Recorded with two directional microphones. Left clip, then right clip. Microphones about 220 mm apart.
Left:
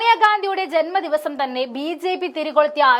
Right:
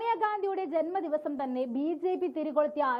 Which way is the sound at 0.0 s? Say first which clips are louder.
Left 14 dB; 5° left (ahead or behind).